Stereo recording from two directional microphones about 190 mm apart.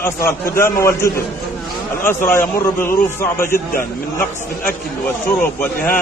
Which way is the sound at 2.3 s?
15° left (ahead or behind).